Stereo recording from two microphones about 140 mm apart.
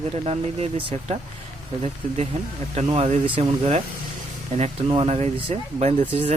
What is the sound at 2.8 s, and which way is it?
Speech, 50° right (ahead or behind).